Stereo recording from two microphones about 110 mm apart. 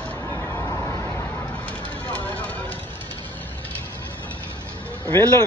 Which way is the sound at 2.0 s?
15° left (ahead or behind).